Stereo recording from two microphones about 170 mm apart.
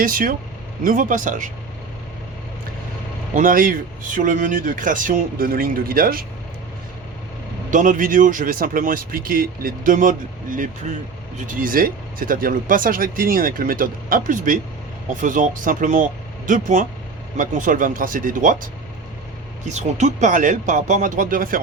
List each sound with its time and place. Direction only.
0.0 s speech: 55° right (ahead or behind)
3.3 s speech: 55° right (ahead or behind)
7.7 s speech: 50° right (ahead or behind)
19.7 s speech: 45° right (ahead or behind)